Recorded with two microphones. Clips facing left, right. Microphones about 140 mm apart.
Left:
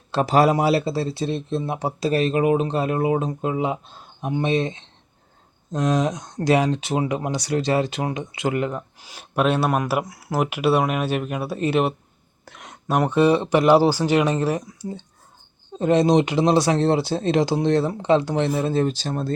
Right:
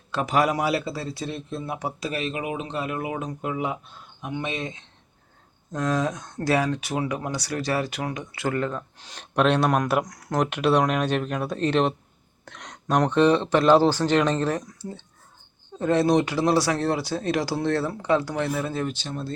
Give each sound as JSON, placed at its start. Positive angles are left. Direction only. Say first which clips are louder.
{"t": 0.1, "sound": "speech", "louder": "left 5 dB", "side_deg": 35}
{"t": 5.7, "sound": "speech", "louder": "left 4 dB", "side_deg": 20}